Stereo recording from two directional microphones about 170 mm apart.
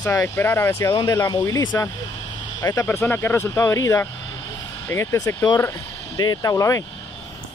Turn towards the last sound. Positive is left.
turn(degrees=20)  # may be behind; listen again after turning